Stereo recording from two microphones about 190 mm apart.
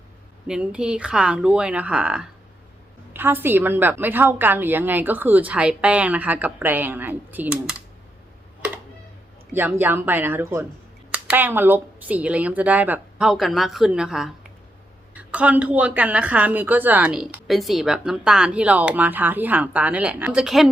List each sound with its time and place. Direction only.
0.4 s a woman's voice: 5° right (ahead or behind)
9.6 s a woman's voice: 10° right (ahead or behind)